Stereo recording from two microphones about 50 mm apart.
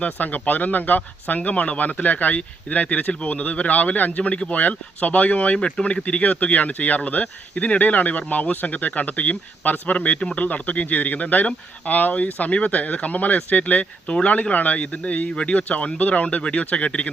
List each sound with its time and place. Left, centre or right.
0.0 s speech: left